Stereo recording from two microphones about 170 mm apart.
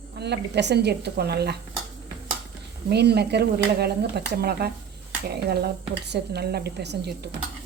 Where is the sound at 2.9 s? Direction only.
75° right (ahead or behind).